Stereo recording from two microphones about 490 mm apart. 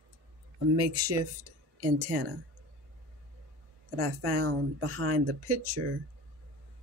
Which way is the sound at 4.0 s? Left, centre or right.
Right.